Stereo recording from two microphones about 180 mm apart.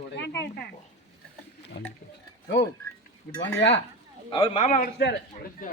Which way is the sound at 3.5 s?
80° left.